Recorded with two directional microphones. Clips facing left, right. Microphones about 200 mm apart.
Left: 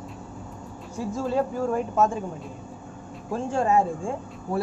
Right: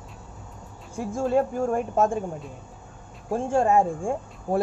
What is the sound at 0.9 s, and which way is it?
Speech, 50° right (ahead or behind).